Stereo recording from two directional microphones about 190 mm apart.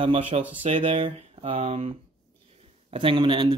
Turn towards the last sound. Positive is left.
turn(degrees=-25)  # may be behind; listen again after turning